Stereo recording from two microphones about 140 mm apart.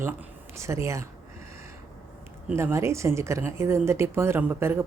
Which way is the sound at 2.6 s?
20° right (ahead or behind).